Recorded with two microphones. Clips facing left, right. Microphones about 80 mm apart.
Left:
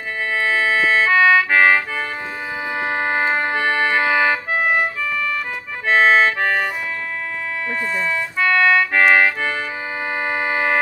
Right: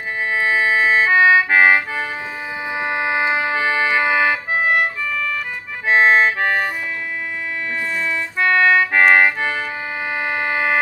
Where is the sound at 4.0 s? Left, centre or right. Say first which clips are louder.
Even; centre.